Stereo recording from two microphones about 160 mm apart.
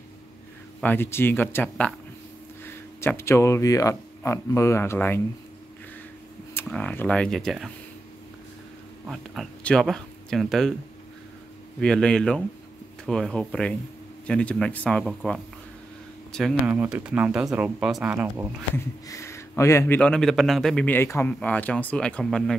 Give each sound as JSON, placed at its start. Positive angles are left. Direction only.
{"t": 0.7, "sound": "a man's voice", "side_deg": 10}
{"t": 6.5, "sound": "speech", "side_deg": 5}
{"t": 9.0, "sound": "speech", "side_deg": 0}
{"t": 11.8, "sound": "a man's voice", "side_deg": 5}
{"t": 16.6, "sound": "speech", "side_deg": -10}
{"t": 19.0, "sound": "speech", "side_deg": 20}
{"t": 20.0, "sound": "a man's voice", "side_deg": 5}